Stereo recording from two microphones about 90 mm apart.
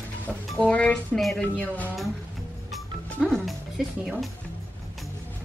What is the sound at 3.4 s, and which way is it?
Speech, centre (ahead or behind).